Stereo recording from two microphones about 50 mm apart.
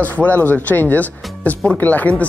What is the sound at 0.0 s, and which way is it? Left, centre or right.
Speech, left.